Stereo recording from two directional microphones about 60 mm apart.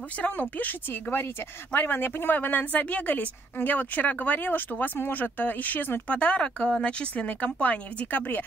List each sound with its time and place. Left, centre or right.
0.2 s speech: left
6.0 s speech: centre